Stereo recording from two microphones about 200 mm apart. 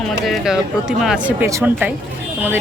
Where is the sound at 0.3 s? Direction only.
5° right (ahead or behind).